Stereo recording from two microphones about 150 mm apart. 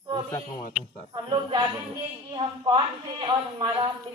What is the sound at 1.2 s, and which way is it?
A woman's voice, 30° right (ahead or behind).